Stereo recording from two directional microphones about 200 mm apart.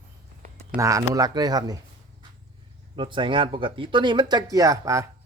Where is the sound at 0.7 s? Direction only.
15° right (ahead or behind).